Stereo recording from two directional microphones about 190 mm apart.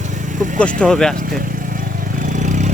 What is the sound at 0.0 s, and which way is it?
Vehicle, 40° right (ahead or behind).